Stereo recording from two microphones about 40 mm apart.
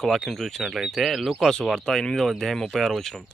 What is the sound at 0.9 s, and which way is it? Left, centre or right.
Speech, centre.